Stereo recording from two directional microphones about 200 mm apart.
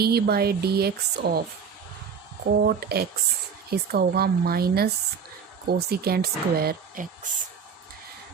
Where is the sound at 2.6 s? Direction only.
50° right (ahead or behind).